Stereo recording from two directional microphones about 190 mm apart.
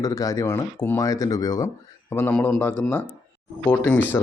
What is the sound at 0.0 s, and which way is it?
Speech, 15° left (ahead or behind).